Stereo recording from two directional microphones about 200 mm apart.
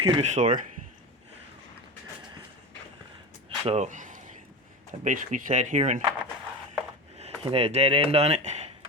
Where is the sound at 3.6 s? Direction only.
30° right (ahead or behind).